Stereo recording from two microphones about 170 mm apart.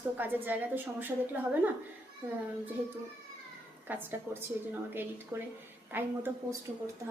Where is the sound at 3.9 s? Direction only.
10° right (ahead or behind).